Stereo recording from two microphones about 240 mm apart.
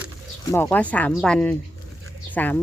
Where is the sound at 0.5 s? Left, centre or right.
Centre.